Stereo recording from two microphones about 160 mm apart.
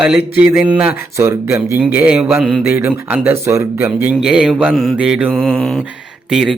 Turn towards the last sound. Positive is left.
turn(degrees=0)  # may be behind; listen again after turning